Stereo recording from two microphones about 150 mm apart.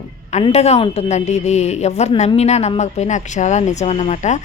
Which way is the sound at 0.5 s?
45° left (ahead or behind).